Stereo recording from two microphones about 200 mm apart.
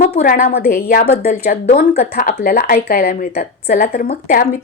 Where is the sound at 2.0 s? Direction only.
45° left (ahead or behind).